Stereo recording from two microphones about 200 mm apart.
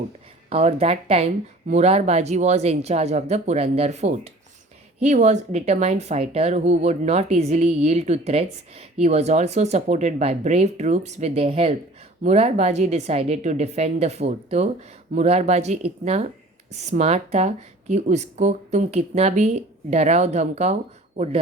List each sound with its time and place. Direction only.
0.5 s speech: 30° right (ahead or behind)